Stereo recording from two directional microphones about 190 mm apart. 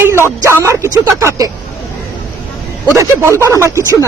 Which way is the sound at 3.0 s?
15° right (ahead or behind).